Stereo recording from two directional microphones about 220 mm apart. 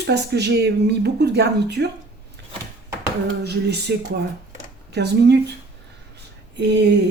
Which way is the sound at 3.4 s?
50° right (ahead or behind).